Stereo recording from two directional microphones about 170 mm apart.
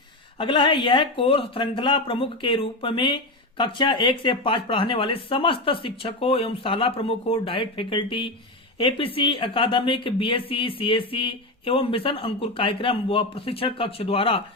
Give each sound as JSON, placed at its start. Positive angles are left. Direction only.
{"t": 0.3, "sound": "speech", "side_deg": 30}